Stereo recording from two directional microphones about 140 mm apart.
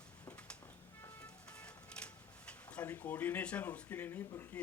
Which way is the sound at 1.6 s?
5° left (ahead or behind).